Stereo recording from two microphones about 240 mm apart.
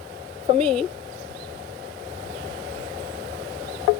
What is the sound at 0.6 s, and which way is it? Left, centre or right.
Speech, centre.